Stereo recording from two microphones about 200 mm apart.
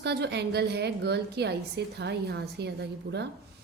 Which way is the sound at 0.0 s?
55° right (ahead or behind).